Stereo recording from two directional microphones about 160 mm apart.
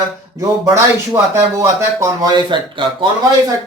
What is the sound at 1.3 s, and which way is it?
Speech, 20° right (ahead or behind).